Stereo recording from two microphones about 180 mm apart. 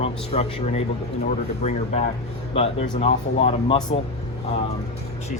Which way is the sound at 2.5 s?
35° left (ahead or behind).